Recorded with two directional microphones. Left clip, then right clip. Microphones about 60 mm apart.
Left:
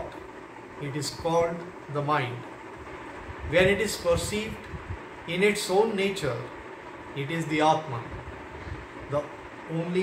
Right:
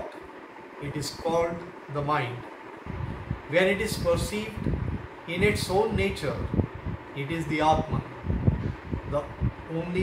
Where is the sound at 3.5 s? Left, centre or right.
Left.